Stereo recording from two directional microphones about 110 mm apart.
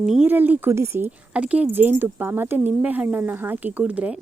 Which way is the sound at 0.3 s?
15° right (ahead or behind).